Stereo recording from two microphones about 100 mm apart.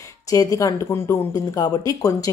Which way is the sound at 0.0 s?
35° left (ahead or behind).